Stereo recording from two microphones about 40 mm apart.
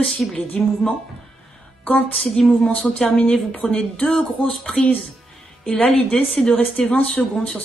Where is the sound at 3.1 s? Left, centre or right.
Left.